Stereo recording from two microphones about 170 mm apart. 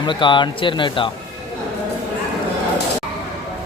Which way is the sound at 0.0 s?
30° left (ahead or behind).